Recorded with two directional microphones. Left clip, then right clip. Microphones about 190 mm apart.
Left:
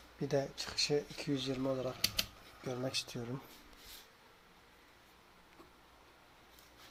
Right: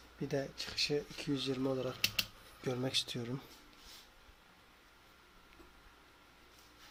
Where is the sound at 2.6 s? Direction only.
30° right (ahead or behind).